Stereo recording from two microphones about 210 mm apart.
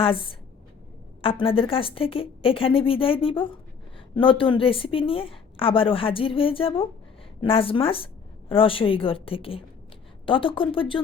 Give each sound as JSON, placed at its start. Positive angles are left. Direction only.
{"t": 0.0, "sound": "a woman's voice", "side_deg": 25}